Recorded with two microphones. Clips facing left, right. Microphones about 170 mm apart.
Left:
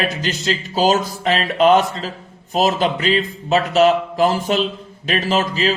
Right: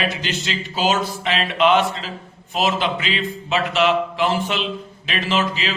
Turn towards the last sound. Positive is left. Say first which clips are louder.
# left 4 dB
turn(degrees=40)  # may be behind; listen again after turning